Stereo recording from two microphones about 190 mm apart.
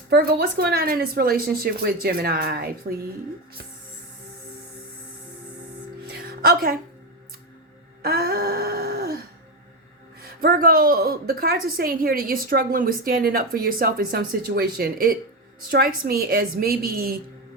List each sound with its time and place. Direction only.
0.1 s a woman's voice: 55° right (ahead or behind)
6.1 s music: 50° right (ahead or behind)
8.0 s a sound: 55° right (ahead or behind)
10.2 s a woman's voice: 50° right (ahead or behind)